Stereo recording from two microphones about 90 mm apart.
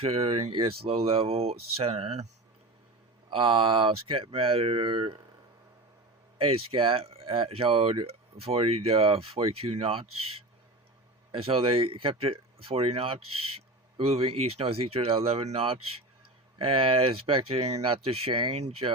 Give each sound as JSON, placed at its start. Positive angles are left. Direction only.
{"t": 0.0, "sound": "speech", "side_deg": -90}
{"t": 3.2, "sound": "speech", "side_deg": -70}
{"t": 6.4, "sound": "speech", "side_deg": -90}
{"t": 11.3, "sound": "speech", "side_deg": -90}